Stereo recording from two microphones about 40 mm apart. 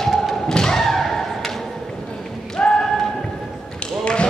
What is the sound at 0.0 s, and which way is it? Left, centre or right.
Thump, centre.